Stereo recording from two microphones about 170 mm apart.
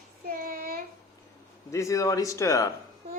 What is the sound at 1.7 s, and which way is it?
Speech, 20° left (ahead or behind).